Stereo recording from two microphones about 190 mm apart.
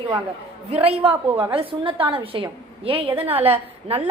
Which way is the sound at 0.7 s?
30° right (ahead or behind).